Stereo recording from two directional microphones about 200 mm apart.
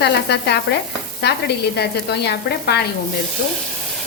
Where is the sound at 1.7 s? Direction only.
55° left (ahead or behind).